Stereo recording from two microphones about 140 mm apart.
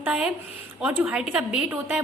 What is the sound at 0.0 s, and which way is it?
A woman's voice, 10° right (ahead or behind).